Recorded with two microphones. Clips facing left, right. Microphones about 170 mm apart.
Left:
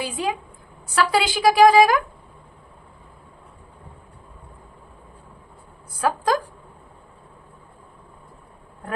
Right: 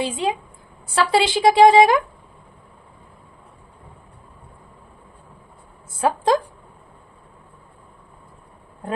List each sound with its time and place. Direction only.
0.0 s a woman's voice: 25° right (ahead or behind)
5.9 s a woman's voice: 25° right (ahead or behind)